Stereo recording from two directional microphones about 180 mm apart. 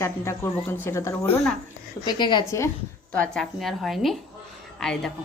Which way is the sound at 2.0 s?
25° left (ahead or behind).